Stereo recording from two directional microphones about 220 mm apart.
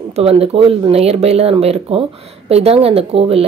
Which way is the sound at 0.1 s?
25° right (ahead or behind).